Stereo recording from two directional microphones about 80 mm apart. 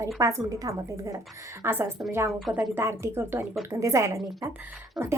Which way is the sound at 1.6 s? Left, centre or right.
Right.